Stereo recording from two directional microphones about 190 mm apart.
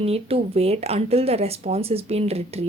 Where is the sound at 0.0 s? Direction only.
30° right (ahead or behind).